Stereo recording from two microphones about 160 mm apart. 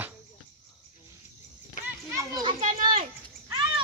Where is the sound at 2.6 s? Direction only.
55° right (ahead or behind).